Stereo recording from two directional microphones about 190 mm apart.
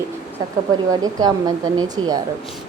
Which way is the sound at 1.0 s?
20° right (ahead or behind).